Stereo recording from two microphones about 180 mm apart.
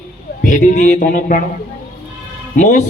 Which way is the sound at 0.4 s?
45° left (ahead or behind).